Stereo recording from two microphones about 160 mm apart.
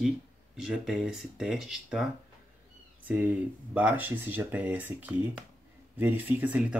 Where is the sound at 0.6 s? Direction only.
5° right (ahead or behind).